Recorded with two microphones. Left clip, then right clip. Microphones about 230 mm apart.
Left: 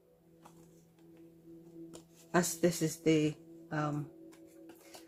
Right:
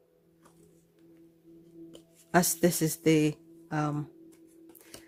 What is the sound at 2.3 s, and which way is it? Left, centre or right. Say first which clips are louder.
Speech: right 5 dB; right.